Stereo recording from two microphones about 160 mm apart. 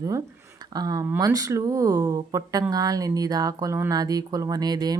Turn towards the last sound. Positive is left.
turn(degrees=-25)  # may be behind; listen again after turning